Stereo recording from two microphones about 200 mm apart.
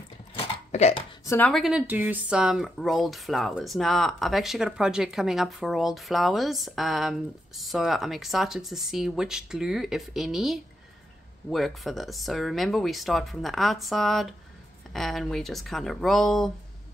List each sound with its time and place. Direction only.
0.7 s cough: 35° left (ahead or behind)
1.2 s speech: 10° left (ahead or behind)